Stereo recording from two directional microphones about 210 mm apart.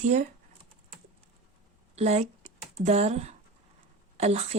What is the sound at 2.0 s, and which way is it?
Speech, 30° right (ahead or behind).